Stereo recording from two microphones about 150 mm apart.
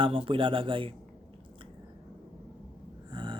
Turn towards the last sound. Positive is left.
turn(degrees=-30)  # may be behind; listen again after turning